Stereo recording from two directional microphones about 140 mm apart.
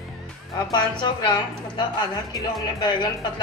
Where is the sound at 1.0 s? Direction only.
35° left (ahead or behind).